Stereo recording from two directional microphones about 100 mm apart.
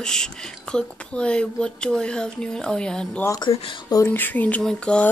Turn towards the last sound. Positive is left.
turn(degrees=10)  # may be behind; listen again after turning